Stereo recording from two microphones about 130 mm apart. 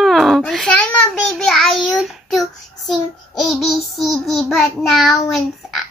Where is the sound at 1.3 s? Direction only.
Centre (ahead or behind).